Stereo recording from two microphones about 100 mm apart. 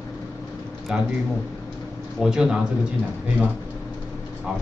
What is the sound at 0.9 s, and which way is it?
Speech, 5° right (ahead or behind).